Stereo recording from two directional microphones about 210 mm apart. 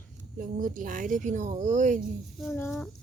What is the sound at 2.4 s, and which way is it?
Child singing, 5° left (ahead or behind).